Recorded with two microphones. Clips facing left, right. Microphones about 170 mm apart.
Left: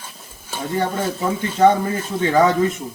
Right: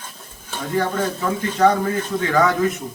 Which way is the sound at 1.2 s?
25° left (ahead or behind).